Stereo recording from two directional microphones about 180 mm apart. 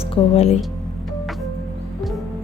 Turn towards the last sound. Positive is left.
turn(degrees=35)  # may be behind; listen again after turning